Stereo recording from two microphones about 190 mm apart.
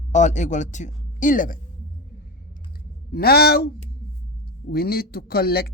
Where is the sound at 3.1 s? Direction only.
55° left (ahead or behind).